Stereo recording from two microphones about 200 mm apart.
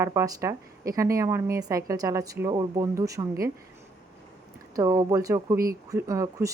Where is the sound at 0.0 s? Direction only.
15° right (ahead or behind).